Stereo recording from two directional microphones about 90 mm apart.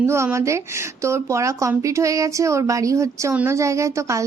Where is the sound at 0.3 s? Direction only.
30° right (ahead or behind).